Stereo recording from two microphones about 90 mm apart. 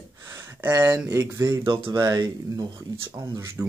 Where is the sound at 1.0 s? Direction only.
35° right (ahead or behind).